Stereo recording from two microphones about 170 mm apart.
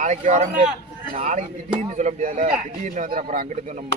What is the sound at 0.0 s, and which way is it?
Speech, 45° right (ahead or behind).